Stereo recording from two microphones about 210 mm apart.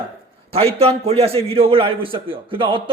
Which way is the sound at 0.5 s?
30° right (ahead or behind).